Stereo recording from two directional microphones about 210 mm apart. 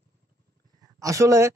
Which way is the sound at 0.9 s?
15° right (ahead or behind).